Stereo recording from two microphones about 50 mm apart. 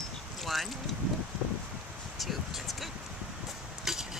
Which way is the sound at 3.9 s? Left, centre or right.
Centre.